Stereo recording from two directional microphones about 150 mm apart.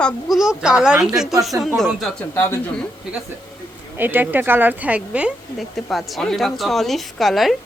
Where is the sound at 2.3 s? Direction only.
15° left (ahead or behind).